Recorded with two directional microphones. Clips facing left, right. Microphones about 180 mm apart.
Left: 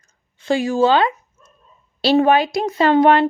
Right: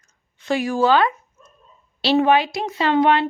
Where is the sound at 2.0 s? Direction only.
45° left (ahead or behind).